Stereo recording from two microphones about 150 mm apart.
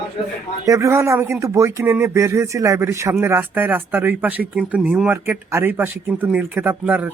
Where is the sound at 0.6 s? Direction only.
20° right (ahead or behind).